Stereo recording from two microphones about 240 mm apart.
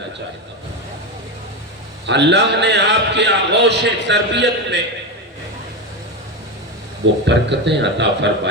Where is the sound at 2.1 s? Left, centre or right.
Right.